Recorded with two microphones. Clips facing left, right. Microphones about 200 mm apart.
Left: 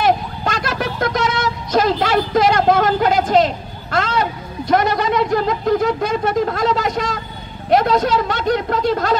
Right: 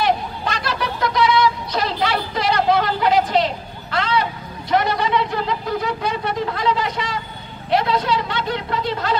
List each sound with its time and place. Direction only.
0.0 s speech: 45° left (ahead or behind)